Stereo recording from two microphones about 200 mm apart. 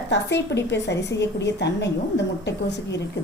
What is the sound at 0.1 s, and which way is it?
A woman's voice, 60° left (ahead or behind).